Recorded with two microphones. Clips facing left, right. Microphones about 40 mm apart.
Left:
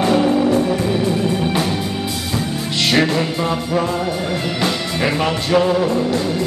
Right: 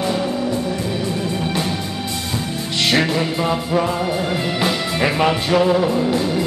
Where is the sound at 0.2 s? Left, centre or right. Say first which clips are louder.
Left 6 dB; left.